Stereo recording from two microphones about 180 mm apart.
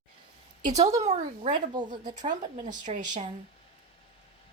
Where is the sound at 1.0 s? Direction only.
40° right (ahead or behind).